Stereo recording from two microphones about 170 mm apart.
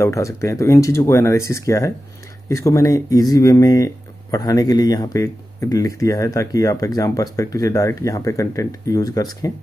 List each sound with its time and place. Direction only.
0.0 s speech: 20° left (ahead or behind)